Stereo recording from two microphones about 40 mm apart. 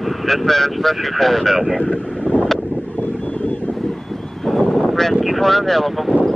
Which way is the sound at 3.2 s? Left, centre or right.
Left.